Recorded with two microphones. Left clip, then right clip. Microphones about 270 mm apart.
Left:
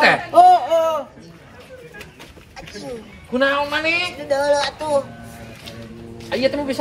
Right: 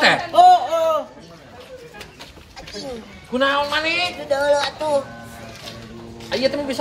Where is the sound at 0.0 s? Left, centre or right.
Centre.